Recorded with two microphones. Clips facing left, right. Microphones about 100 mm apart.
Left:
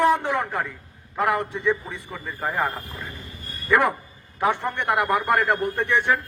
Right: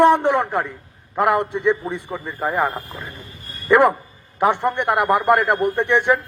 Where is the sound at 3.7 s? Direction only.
25° right (ahead or behind).